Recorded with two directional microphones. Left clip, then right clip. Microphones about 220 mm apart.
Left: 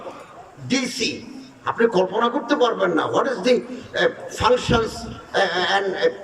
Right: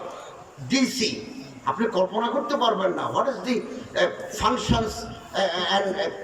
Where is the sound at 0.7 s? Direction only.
50° left (ahead or behind).